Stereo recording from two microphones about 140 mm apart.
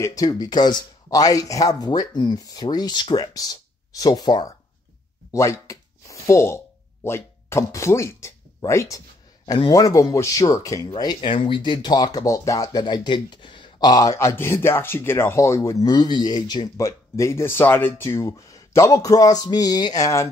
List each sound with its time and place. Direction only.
0.0 s speech: 25° left (ahead or behind)
5.3 s a sound: 20° left (ahead or behind)
9.7 s speech: 25° left (ahead or behind)